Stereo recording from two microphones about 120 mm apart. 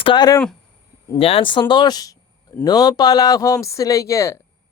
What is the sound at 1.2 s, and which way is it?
Speech, 50° left (ahead or behind).